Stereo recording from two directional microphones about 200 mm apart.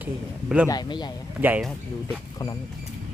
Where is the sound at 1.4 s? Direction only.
10° right (ahead or behind).